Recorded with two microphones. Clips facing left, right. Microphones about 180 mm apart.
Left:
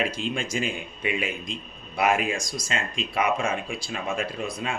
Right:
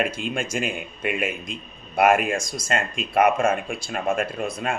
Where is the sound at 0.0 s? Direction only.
55° right (ahead or behind).